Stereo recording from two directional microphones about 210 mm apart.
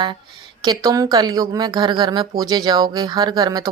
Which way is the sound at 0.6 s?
20° right (ahead or behind).